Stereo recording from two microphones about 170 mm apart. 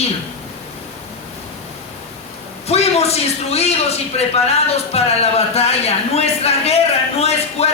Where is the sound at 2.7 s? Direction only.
40° left (ahead or behind).